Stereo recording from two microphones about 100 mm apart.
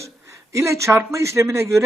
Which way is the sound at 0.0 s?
30° right (ahead or behind).